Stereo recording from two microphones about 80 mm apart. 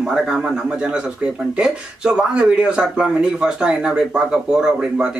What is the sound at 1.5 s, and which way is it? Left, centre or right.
Speech, centre.